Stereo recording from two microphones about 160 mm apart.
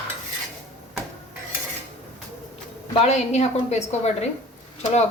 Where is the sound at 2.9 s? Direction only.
40° left (ahead or behind).